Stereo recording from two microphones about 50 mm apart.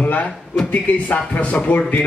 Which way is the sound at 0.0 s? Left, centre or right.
Left.